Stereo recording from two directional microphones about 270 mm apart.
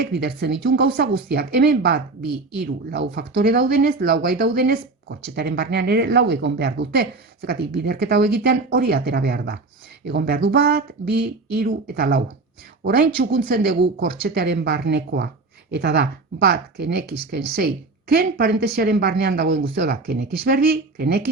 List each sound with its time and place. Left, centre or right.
0.0 s speech: right